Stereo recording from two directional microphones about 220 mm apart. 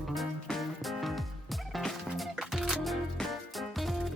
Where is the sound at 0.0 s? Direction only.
Centre (ahead or behind).